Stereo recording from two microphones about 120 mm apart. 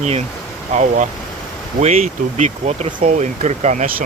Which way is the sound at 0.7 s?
80° right.